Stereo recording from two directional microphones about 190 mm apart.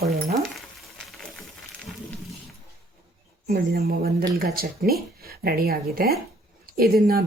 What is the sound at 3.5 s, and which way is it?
Speech, 55° right (ahead or behind).